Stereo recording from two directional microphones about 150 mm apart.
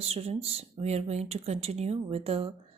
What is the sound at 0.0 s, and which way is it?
A woman's voice, 40° right (ahead or behind).